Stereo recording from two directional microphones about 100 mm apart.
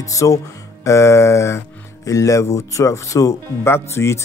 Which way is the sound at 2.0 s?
30° left (ahead or behind).